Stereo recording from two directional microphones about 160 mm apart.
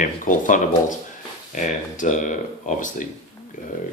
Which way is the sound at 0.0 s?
55° left (ahead or behind).